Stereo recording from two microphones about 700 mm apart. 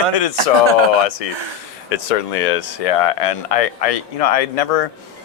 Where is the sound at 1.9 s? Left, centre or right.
Left.